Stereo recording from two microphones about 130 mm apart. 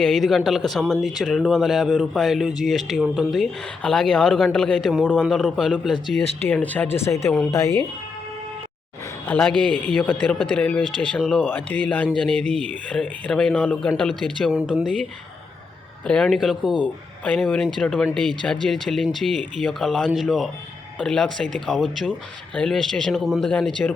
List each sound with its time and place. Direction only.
0.0 s speech: centre (ahead or behind)
6.4 s speech: 15° left (ahead or behind)
9.2 s speech: 10° left (ahead or behind)
11.2 s speech: centre (ahead or behind)
11.4 s speech: 15° left (ahead or behind)
14.5 s speech: 10° right (ahead or behind)
16.0 s speech: 5° left (ahead or behind)
17.2 s speech: 5° left (ahead or behind)